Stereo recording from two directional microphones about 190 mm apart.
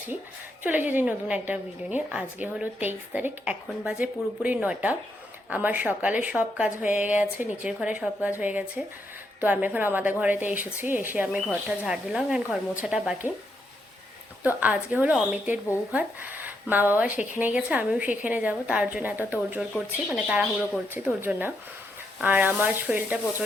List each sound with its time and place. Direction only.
0.6 s a woman's voice: 10° right (ahead or behind)
14.4 s a woman's voice: 10° right (ahead or behind)